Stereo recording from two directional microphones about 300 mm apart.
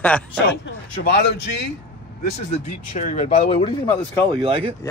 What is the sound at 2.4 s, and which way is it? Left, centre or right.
Speech, left.